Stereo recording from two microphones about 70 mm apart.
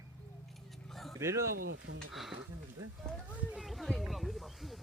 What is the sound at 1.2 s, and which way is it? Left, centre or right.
Speech, right.